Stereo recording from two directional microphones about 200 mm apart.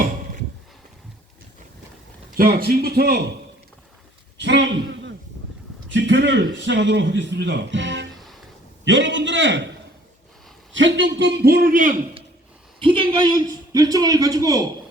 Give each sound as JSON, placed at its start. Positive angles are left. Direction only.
{"t": 2.3, "sound": "a man's voice", "side_deg": -45}
{"t": 4.4, "sound": "a man's voice", "side_deg": -60}
{"t": 10.7, "sound": "a man's voice", "side_deg": -65}
{"t": 12.8, "sound": "a man's voice", "side_deg": -25}